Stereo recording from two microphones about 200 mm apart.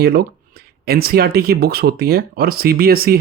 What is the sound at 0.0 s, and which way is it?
Speech, 50° right (ahead or behind).